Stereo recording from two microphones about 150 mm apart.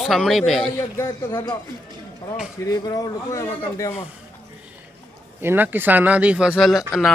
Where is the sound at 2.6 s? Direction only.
25° left (ahead or behind).